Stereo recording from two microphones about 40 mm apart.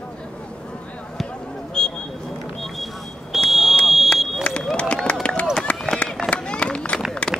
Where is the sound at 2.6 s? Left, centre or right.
Centre.